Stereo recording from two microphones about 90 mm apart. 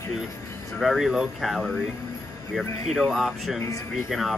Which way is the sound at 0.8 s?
5° right (ahead or behind).